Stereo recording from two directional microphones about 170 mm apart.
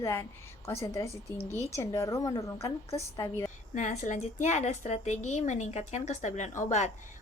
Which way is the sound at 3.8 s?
45° left (ahead or behind).